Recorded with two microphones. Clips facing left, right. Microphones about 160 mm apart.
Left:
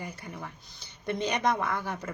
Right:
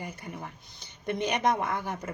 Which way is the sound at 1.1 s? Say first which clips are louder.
Right 1 dB; 20° right (ahead or behind).